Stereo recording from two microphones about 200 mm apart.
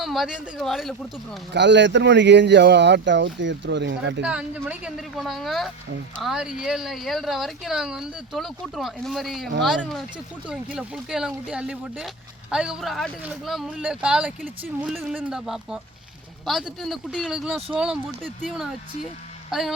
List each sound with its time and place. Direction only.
0.0 s speech: centre (ahead or behind)
1.5 s speech: 60° right (ahead or behind)
4.2 s speech: 5° right (ahead or behind)